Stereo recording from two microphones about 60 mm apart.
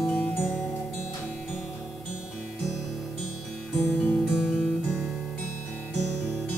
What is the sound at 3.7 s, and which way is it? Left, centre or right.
Music, left.